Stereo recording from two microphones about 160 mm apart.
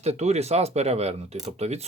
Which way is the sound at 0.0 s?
40° right (ahead or behind).